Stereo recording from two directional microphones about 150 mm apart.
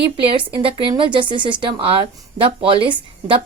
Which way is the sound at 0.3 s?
35° right (ahead or behind).